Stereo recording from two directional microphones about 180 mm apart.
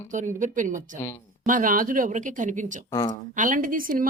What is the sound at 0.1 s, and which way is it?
Speech, 45° right (ahead or behind).